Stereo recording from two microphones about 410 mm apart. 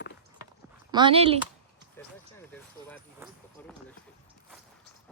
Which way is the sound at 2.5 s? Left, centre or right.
Centre.